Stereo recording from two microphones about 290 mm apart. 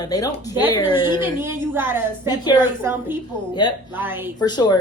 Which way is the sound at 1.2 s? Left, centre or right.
Centre.